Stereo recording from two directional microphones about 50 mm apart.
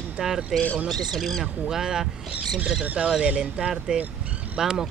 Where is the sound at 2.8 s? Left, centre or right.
Right.